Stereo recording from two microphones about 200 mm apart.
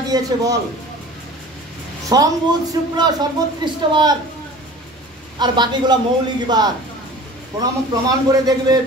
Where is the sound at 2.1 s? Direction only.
20° right (ahead or behind).